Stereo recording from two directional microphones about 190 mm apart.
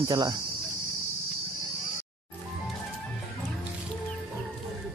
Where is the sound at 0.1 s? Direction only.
20° right (ahead or behind).